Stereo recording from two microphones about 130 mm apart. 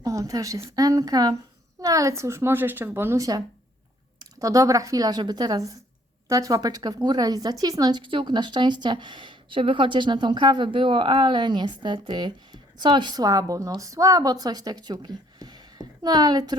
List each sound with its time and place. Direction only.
0.0 s a woman's voice: 25° right (ahead or behind)